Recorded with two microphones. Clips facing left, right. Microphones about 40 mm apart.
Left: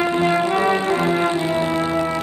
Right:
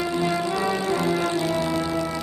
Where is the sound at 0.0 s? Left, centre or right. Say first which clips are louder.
Left 6 dB; left.